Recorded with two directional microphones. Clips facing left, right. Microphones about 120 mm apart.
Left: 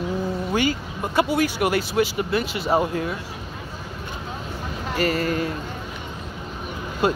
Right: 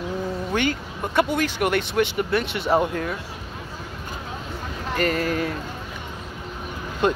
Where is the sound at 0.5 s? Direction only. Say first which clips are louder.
Left 1 dB; 10° left (ahead or behind).